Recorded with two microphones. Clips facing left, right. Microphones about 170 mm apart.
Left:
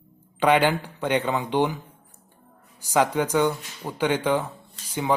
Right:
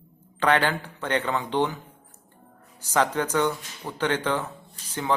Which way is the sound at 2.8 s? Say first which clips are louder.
Left 2 dB; 10° left (ahead or behind).